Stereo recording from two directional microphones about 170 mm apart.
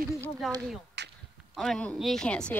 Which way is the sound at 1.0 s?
80° right.